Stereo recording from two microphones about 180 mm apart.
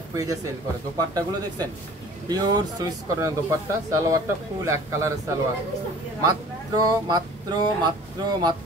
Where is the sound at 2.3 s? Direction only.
20° right (ahead or behind).